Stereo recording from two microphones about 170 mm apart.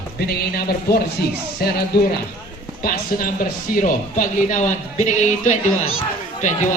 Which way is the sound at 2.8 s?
55° left (ahead or behind).